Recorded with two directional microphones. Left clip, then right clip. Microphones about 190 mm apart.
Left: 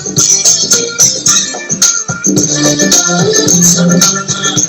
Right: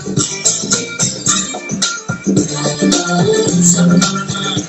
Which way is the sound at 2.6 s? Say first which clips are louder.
Left 6 dB; 30° left (ahead or behind).